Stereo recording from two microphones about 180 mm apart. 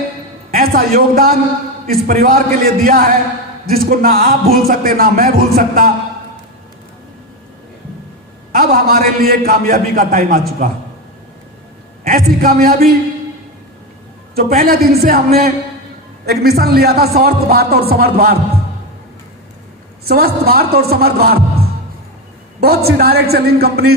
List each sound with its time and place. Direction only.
0.5 s a man's voice: 55° right (ahead or behind)
3.7 s music: 55° right (ahead or behind)
8.5 s a man's voice: 55° right (ahead or behind)
12.0 s a man's voice: 50° right (ahead or behind)
14.3 s music: 55° right (ahead or behind)
20.1 s music: 60° right (ahead or behind)
22.6 s music: 60° right (ahead or behind)